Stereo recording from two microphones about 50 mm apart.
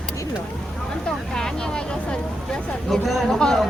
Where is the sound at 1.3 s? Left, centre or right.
Centre.